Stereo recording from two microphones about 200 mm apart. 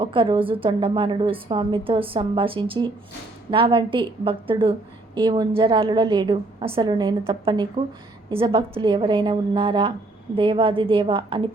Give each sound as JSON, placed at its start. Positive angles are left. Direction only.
{"t": 0.0, "sound": "a woman's voice", "side_deg": -25}